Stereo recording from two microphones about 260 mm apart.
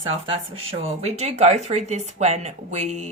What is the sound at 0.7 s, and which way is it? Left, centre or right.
Speech, right.